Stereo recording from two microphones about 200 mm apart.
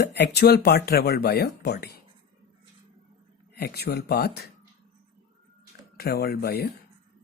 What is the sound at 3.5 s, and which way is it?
Speech, 50° left (ahead or behind).